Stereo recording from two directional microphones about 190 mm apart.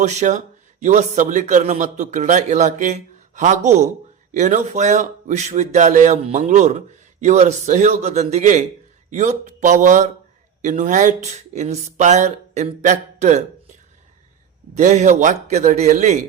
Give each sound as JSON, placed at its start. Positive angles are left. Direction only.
{"t": 0.0, "sound": "speech", "side_deg": -40}
{"t": 14.8, "sound": "speech", "side_deg": -40}